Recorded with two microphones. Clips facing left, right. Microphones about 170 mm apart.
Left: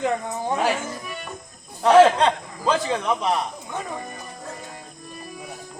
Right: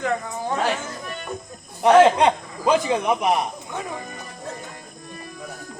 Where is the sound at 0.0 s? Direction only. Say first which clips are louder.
Left 1 dB; 15° left (ahead or behind).